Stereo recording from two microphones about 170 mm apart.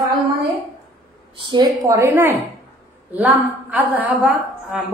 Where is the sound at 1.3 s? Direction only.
30° right (ahead or behind); by 4.8 s 10° right (ahead or behind).